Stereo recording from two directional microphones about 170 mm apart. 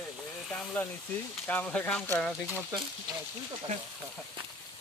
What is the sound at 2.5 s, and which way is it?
Speech, 10° right (ahead or behind).